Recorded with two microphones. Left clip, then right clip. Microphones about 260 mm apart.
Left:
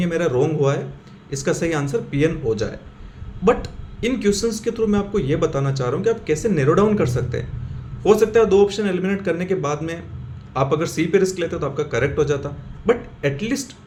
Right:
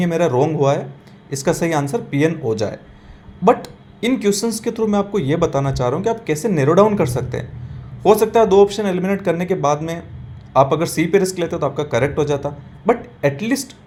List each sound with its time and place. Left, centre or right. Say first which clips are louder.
0.0 s speech: right 3 dB; right